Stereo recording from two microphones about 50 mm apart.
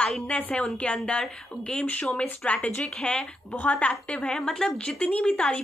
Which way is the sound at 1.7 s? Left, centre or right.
Left.